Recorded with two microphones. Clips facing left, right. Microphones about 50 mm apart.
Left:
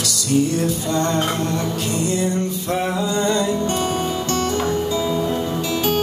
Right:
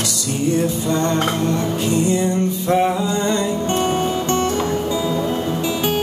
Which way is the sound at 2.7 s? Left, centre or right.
Right.